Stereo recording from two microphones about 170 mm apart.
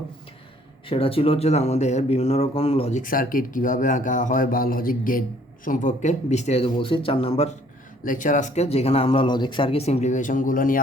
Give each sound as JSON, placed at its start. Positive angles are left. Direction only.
{"t": 0.9, "sound": "speech", "side_deg": 35}
{"t": 3.0, "sound": "a man's voice", "side_deg": 55}
{"t": 8.0, "sound": "speech", "side_deg": 50}